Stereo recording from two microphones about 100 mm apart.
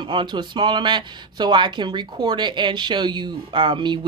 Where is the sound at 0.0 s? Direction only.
50° right (ahead or behind).